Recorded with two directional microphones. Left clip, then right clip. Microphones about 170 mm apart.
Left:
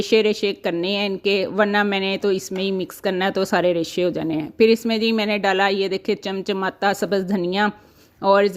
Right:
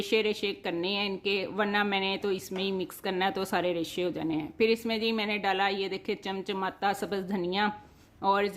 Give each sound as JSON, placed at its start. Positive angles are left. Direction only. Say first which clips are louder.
{"t": 0.0, "sound": "speech", "louder": "left 10 dB", "side_deg": 35}